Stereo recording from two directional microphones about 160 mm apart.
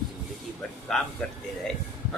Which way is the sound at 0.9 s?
5° left (ahead or behind).